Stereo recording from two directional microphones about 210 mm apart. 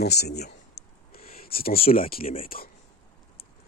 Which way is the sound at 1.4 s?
45° left (ahead or behind).